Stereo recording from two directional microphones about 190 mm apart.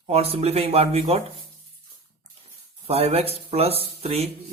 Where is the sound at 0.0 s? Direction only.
30° right (ahead or behind).